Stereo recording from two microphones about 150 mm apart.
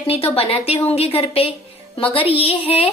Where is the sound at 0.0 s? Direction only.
40° left (ahead or behind).